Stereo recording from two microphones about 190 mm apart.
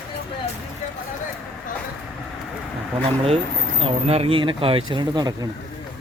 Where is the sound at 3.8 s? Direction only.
30° right (ahead or behind).